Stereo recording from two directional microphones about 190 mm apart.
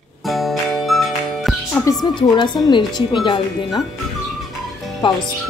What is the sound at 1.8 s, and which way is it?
Speech, 20° left (ahead or behind).